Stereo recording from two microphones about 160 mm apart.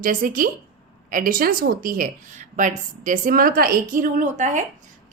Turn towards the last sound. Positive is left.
turn(degrees=-50)  # may be behind; listen again after turning